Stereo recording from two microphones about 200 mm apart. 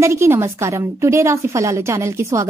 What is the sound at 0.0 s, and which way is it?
A woman's voice, 15° right (ahead or behind).